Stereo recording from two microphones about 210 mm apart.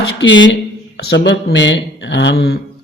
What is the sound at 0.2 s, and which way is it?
Speech, 60° left (ahead or behind).